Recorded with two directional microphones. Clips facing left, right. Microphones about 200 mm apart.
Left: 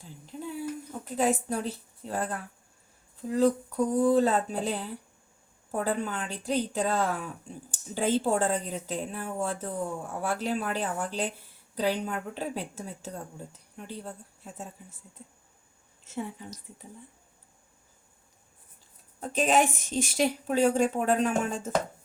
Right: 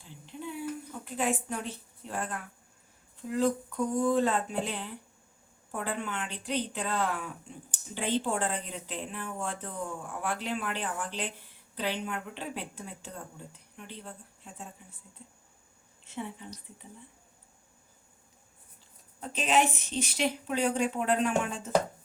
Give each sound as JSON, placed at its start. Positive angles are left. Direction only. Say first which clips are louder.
{"t": 0.0, "sound": "a sound", "louder": "left 2 dB", "side_deg": 40}
{"t": 1.0, "sound": "a woman's voice", "louder": "left 5 dB", "side_deg": 40}
{"t": 19.2, "sound": "a woman's voice", "louder": "left 3 dB", "side_deg": 45}